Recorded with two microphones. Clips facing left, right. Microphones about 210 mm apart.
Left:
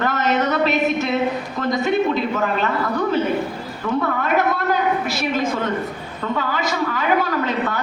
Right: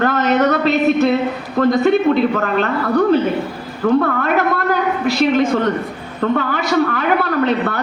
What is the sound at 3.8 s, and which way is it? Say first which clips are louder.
Speech: right 8 dB; 60° right (ahead or behind).